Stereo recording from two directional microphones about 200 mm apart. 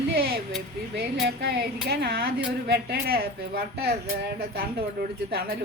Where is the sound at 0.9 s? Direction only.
55° right (ahead or behind).